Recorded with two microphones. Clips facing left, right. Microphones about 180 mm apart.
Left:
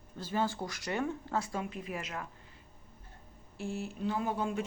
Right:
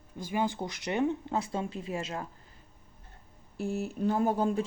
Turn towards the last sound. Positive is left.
turn(degrees=-40)  # may be behind; listen again after turning